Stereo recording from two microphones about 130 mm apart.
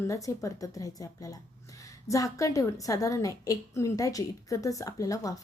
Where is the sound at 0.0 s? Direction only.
25° left (ahead or behind).